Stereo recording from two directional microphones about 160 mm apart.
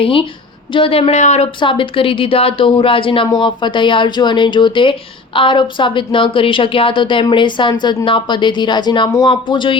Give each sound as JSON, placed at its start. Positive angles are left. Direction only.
{"t": 0.0, "sound": "speech", "side_deg": 35}
{"t": 1.5, "sound": "speech", "side_deg": 30}